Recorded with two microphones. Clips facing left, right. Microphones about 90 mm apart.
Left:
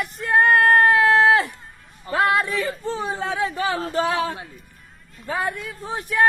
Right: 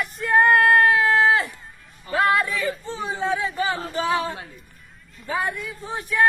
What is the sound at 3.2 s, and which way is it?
Speech, 55° left (ahead or behind).